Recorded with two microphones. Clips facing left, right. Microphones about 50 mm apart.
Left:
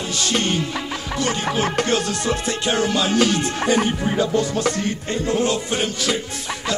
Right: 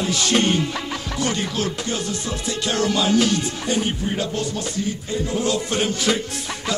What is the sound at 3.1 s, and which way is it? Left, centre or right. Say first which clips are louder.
Music: left 1 dB; left.